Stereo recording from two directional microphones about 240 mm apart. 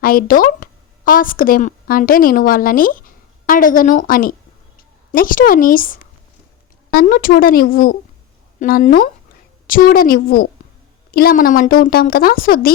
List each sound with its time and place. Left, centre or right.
0.0 s a woman's voice: left